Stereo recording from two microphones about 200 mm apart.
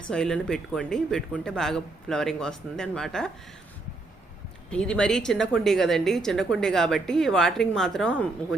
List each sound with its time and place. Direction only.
0.1 s a woman's voice: 5° left (ahead or behind)
4.7 s a woman's voice: 5° left (ahead or behind)